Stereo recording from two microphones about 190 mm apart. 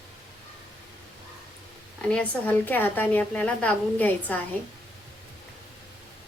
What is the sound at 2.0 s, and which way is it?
A woman's voice, 5° left (ahead or behind).